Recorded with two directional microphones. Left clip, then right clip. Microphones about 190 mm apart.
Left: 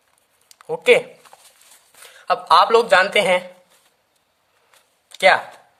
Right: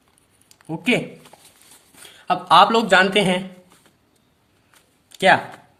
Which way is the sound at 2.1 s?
45° left (ahead or behind).